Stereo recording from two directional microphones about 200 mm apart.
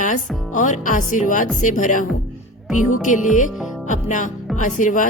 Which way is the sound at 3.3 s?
40° left (ahead or behind).